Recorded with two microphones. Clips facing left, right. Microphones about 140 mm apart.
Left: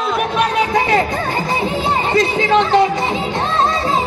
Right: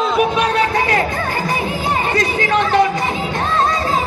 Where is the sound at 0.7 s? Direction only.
20° left (ahead or behind).